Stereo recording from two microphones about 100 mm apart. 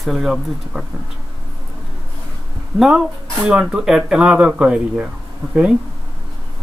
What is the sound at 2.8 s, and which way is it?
Speech, 5° right (ahead or behind).